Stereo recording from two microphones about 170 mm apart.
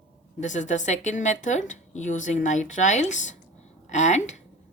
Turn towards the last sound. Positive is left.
turn(degrees=45)  # may be behind; listen again after turning